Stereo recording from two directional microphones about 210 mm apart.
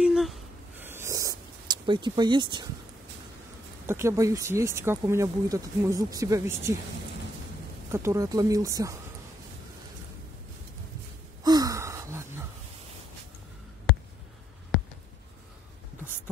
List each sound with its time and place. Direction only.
0.0 s a sound: centre (ahead or behind); by 2.7 s 20° right (ahead or behind)
3.8 s speech: 10° right (ahead or behind)
7.9 s speech: 15° right (ahead or behind)
11.4 s gasp: 15° right (ahead or behind)